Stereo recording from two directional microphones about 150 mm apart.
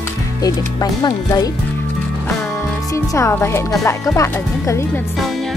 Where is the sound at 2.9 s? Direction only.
20° left (ahead or behind).